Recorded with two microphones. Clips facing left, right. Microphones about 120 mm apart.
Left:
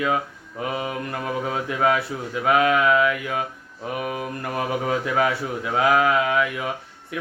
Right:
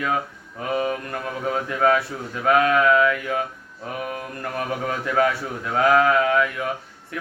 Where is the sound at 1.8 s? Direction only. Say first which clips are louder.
Right 2 dB; 15° left (ahead or behind).